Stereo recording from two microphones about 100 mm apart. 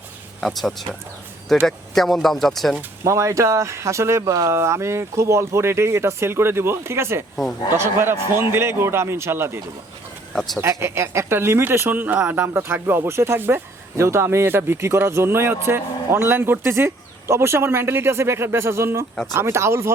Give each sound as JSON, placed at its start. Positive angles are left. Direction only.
{"t": 0.4, "sound": "speech", "side_deg": 0}
{"t": 3.0, "sound": "speech", "side_deg": -30}
{"t": 10.6, "sound": "speech", "side_deg": -30}